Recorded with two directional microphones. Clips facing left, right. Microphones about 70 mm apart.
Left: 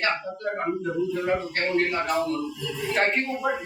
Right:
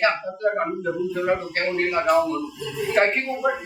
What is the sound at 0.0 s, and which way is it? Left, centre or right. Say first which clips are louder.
A man's voice: right 6 dB; centre.